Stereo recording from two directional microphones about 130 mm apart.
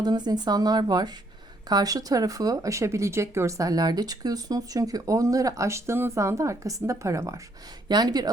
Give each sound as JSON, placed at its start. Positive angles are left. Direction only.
{"t": 0.0, "sound": "speech", "side_deg": -30}